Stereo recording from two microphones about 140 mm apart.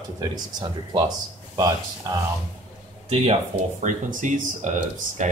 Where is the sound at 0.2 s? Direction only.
30° right (ahead or behind).